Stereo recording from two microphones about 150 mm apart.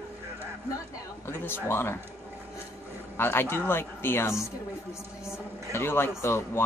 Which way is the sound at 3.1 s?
15° left (ahead or behind).